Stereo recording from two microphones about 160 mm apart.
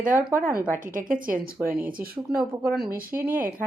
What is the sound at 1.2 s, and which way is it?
Speech, 65° right (ahead or behind).